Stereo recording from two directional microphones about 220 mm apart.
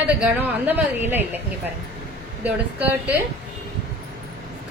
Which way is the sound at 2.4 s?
5° right (ahead or behind).